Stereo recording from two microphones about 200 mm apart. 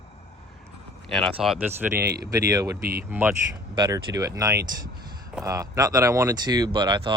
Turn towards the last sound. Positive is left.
turn(degrees=-20)  # may be behind; listen again after turning